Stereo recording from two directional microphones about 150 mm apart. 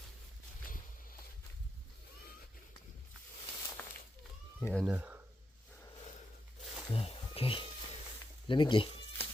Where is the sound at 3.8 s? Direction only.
10° left (ahead or behind).